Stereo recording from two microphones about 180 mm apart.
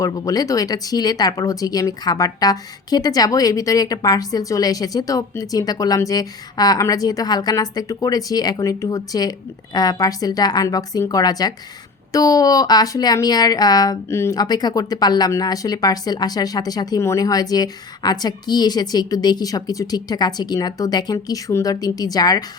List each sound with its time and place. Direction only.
0.0 s a woman's voice: 20° left (ahead or behind)